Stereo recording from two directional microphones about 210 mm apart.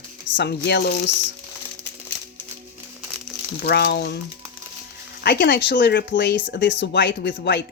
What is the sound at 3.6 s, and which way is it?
Speech, 50° left (ahead or behind).